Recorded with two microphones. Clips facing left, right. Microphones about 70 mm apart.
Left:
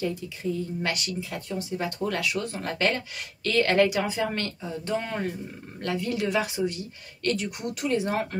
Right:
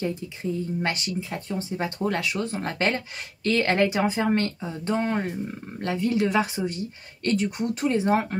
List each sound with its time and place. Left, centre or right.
0.0 s speech: right